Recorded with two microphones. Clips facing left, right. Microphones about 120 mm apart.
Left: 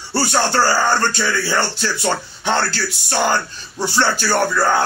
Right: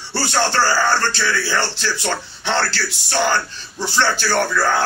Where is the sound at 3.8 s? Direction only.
15° left (ahead or behind).